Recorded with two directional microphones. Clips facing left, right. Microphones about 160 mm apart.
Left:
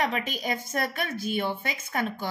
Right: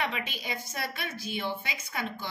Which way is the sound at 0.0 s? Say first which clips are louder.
Left 5 dB; 45° left (ahead or behind).